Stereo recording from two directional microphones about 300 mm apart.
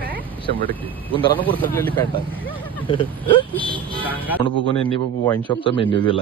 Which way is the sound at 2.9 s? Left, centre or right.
Centre.